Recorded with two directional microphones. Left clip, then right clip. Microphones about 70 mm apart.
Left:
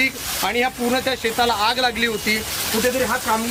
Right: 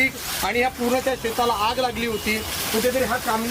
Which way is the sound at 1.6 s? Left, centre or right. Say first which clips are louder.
Left 4 dB; left.